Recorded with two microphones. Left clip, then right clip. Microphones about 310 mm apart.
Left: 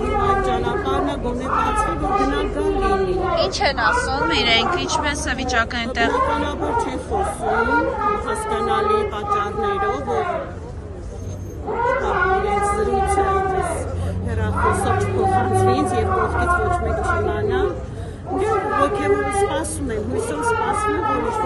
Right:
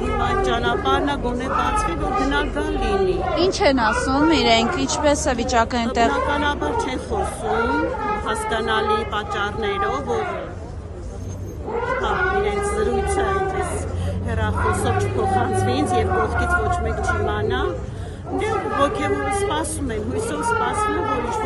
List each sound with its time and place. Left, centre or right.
0.2 s speech: centre
3.3 s a woman's voice: right
6.3 s speech: centre
12.0 s a sound: centre
14.4 s speech: centre